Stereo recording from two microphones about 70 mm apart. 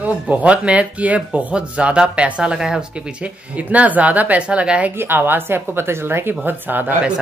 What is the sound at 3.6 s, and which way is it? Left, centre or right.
Speech, right.